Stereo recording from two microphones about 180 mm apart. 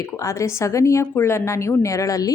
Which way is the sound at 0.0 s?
15° left (ahead or behind).